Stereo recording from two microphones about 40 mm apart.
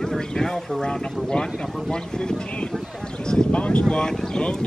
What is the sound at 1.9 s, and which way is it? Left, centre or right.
Speech, centre.